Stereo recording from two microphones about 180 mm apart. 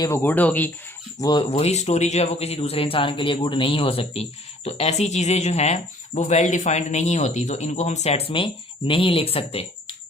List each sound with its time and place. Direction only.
0.0 s speech: 15° left (ahead or behind)
1.2 s speech: 25° left (ahead or behind)
1.5 s speech: 35° left (ahead or behind)